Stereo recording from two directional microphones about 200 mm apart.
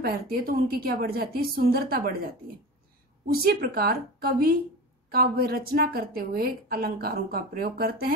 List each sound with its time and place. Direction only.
0.0 s a woman's voice: 45° right (ahead or behind)
3.3 s a woman's voice: 50° right (ahead or behind)